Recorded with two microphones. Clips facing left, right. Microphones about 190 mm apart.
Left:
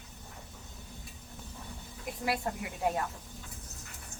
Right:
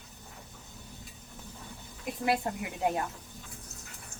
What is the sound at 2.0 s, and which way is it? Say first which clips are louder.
Speech: right 4 dB; 25° right (ahead or behind).